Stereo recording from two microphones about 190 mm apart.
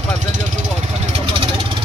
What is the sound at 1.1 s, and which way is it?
Vehicle, 30° right (ahead or behind).